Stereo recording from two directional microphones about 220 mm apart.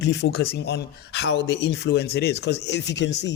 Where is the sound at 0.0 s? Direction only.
50° left (ahead or behind).